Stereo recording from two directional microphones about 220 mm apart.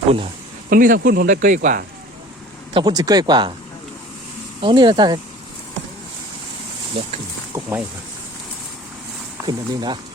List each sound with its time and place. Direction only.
0.7 s speech: 40° right (ahead or behind)
2.7 s speech: 20° right (ahead or behind)
4.6 s speech: 20° right (ahead or behind)
7.5 s speech: 5° right (ahead or behind)
9.5 s speech: 20° right (ahead or behind)